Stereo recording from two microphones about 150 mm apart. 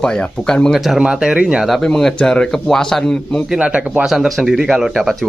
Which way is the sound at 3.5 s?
10° right (ahead or behind).